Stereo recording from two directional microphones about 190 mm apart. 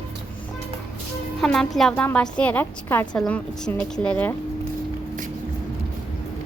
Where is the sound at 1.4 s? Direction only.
5° left (ahead or behind).